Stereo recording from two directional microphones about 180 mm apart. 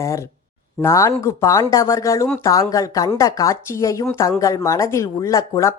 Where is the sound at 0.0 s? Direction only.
15° left (ahead or behind).